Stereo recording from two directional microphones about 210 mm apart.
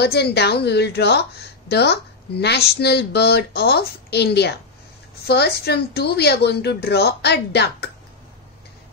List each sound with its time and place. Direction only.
0.0 s speech: 50° left (ahead or behind)